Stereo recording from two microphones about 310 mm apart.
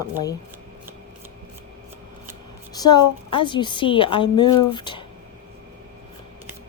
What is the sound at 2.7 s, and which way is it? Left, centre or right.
A woman's voice, centre.